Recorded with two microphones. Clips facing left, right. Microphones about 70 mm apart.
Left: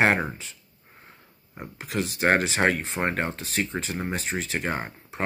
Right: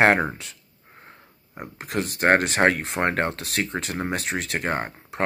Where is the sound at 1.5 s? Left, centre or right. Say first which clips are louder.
Right 2 dB; right.